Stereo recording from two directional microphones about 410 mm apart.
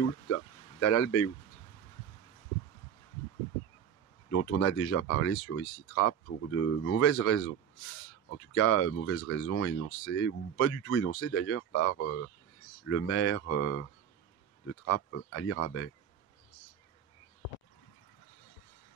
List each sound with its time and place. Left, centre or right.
0.3 s a sound: left
4.3 s speech: left
14.9 s speech: left